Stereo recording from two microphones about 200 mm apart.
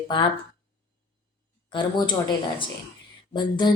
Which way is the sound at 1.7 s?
25° left (ahead or behind).